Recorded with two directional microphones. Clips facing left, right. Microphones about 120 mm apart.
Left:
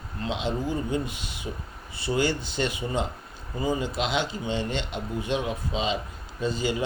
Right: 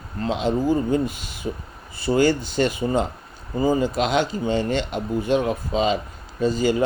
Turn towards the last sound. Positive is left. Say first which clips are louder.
# right 7 dB
turn(degrees=-45)  # may be behind; listen again after turning